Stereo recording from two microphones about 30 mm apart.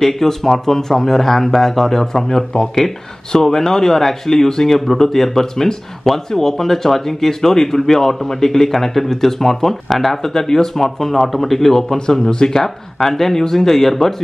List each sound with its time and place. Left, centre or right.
0.0 s speech: centre
12.3 s speech: left
12.5 s speech: centre